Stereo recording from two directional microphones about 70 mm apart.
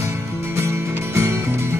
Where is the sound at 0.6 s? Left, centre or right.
Right.